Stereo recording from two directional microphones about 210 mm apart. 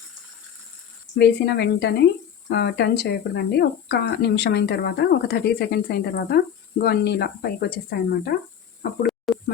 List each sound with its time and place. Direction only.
1.2 s speech: 50° left (ahead or behind)
9.0 s snake: centre (ahead or behind)